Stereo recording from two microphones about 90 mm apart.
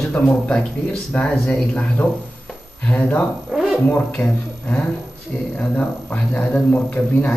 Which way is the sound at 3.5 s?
5° left (ahead or behind).